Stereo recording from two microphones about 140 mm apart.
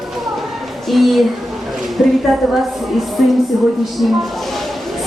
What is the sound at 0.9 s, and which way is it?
Speech, centre (ahead or behind).